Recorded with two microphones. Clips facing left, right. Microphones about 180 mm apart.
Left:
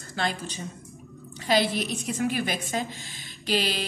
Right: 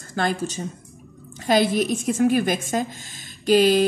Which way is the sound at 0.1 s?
45° right (ahead or behind).